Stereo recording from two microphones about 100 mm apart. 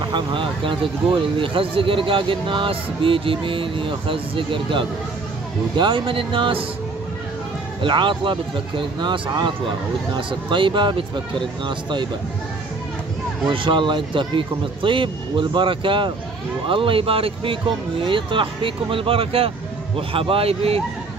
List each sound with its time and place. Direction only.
0.0 s speech: 50° right (ahead or behind)
7.8 s speech: 55° right (ahead or behind)
13.5 s a man's voice: 55° right (ahead or behind); by 20.8 s 80° right